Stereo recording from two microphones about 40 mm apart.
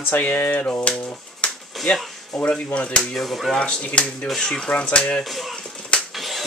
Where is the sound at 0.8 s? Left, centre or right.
Left.